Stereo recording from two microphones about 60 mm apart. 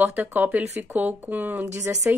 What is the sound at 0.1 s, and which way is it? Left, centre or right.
A woman's voice, right.